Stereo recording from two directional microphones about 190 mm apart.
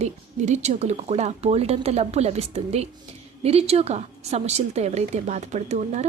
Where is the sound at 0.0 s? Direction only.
35° right (ahead or behind).